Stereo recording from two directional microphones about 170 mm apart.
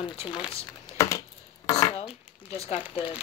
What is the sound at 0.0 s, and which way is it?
Speech, 30° left (ahead or behind).